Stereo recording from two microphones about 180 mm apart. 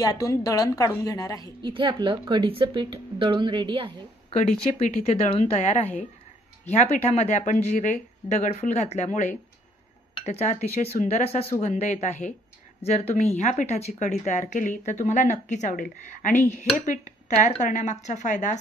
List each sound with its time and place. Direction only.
0.0 s a woman's voice: 20° left (ahead or behind)
1.6 s a woman's voice: 30° right (ahead or behind)
4.4 s speech: 40° left (ahead or behind)